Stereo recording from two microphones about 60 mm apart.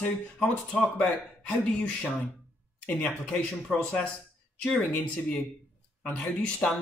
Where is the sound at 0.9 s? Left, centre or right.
Left.